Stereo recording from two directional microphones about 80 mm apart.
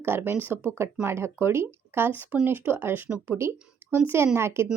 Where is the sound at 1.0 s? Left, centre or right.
Right.